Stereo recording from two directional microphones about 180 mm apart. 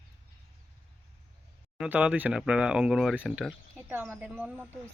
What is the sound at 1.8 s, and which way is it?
Speech, 5° right (ahead or behind).